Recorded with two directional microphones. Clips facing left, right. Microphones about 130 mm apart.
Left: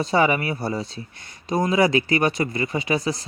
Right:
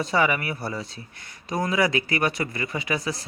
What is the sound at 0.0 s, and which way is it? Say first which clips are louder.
Speech: left 3 dB; 30° left (ahead or behind).